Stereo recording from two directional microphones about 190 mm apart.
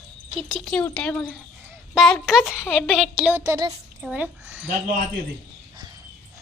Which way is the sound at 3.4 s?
20° right (ahead or behind).